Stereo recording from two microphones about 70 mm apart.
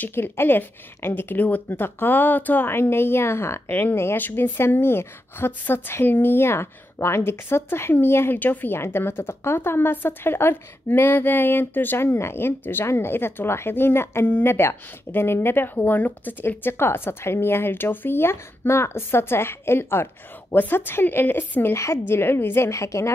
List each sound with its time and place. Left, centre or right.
0.0 s a woman's voice: left
21.7 s a woman's voice: left
22.7 s a woman's voice: left